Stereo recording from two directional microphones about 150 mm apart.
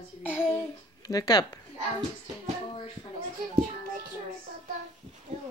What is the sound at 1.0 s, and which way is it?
Speech, 25° left (ahead or behind).